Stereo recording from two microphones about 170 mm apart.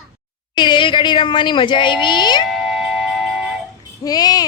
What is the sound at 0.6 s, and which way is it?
Speech, 30° left (ahead or behind).